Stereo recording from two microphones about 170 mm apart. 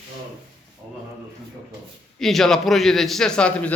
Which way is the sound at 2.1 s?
Centre (ahead or behind).